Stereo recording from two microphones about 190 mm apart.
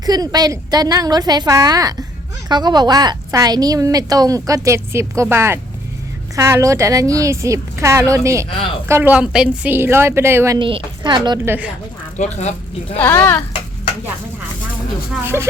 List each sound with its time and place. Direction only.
0.0 s a woman's voice: 20° right (ahead or behind)
8.4 s speech: 30° left (ahead or behind)
8.9 s a woman's voice: 10° right (ahead or behind)
10.6 s a woman's voice: 25° right (ahead or behind)
11.4 s a woman's voice: 10° right (ahead or behind)
12.1 s speech: 35° left (ahead or behind)
13.0 s speech: 10° left (ahead or behind)